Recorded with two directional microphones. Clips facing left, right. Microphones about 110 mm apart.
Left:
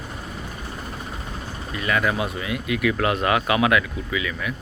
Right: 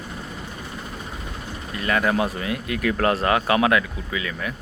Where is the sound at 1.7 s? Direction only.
30° right (ahead or behind).